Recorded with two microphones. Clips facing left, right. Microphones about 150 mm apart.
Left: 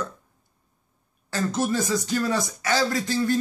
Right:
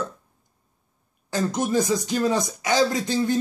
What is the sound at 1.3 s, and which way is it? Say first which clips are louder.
Speech: right 1 dB; 15° right (ahead or behind).